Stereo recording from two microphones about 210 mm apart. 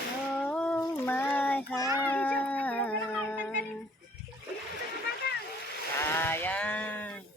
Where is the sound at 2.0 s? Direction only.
5° left (ahead or behind).